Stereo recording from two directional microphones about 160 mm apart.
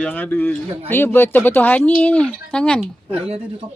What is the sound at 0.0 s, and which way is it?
Speech, 10° left (ahead or behind).